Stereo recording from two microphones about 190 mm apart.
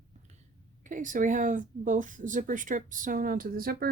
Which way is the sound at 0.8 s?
45° right (ahead or behind).